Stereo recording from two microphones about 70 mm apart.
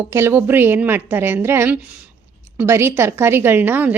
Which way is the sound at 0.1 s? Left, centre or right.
Right.